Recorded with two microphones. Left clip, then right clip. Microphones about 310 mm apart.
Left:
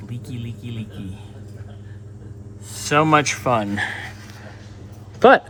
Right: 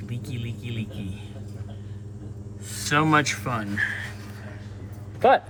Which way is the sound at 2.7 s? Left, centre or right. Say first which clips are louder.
Left 5 dB; centre.